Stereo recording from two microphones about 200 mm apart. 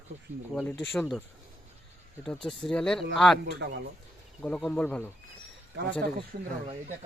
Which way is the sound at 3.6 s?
60° right (ahead or behind).